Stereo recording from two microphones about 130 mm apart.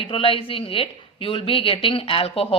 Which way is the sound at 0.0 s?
45° left (ahead or behind).